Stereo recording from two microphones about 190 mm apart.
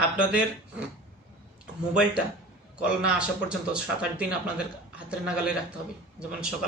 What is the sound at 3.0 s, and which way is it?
Speech, 5° right (ahead or behind).